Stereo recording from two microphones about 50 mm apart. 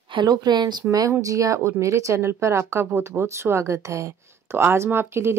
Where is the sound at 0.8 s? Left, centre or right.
Centre.